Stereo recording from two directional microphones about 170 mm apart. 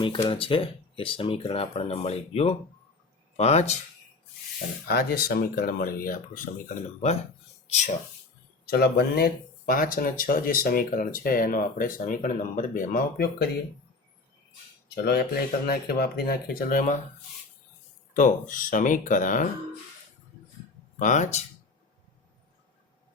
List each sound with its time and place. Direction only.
0.0 s speech: 30° left (ahead or behind)
4.9 s speech: 65° left (ahead or behind); by 7.2 s 45° left (ahead or behind)
8.6 s speech: 70° left (ahead or behind)
14.8 s speech: 70° left (ahead or behind); by 17.0 s 50° left (ahead or behind)
18.1 s speech: 50° left (ahead or behind)
21.0 s speech: 45° left (ahead or behind)